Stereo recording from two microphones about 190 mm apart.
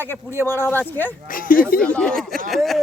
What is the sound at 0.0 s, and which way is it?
Speech, 10° left (ahead or behind).